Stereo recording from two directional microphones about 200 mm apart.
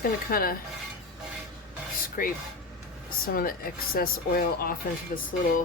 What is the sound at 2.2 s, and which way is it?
Speech, 45° left (ahead or behind).